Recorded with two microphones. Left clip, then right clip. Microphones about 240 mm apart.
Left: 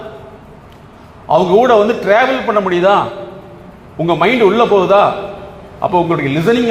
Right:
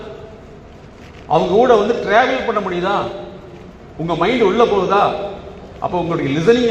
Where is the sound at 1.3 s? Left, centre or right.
Left.